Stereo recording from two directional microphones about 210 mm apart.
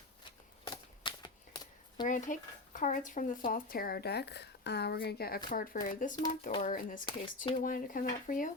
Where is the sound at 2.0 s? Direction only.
40° left (ahead or behind).